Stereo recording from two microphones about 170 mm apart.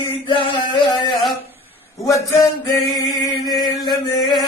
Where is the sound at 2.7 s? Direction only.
20° left (ahead or behind).